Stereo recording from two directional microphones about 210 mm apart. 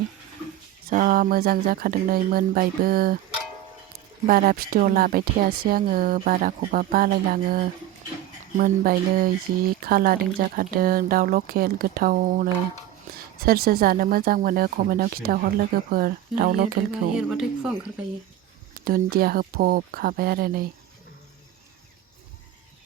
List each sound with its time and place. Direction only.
0.9 s speech: 40° right (ahead or behind)
4.3 s speech: 45° right (ahead or behind)
17.2 s speech: 5° right (ahead or behind)
18.9 s speech: 45° right (ahead or behind)